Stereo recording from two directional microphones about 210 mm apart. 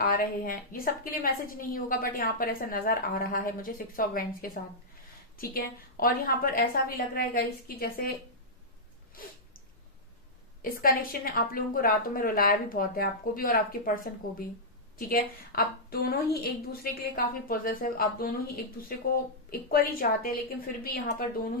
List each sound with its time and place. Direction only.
0.0 s a woman's voice: 45° left (ahead or behind)
10.6 s a woman's voice: 45° left (ahead or behind)